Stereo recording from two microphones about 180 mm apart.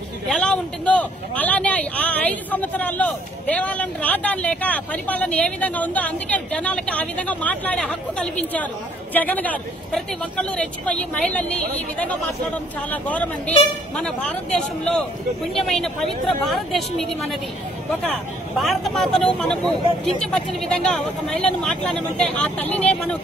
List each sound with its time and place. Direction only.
0.3 s speech: 5° left (ahead or behind)
12.9 s speech: 10° left (ahead or behind)